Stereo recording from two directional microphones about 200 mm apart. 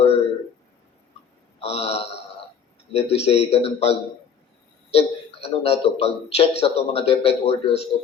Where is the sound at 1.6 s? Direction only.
30° left (ahead or behind).